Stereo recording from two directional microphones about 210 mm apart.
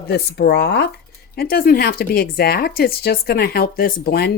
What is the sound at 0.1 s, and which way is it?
Speech, 55° left (ahead or behind).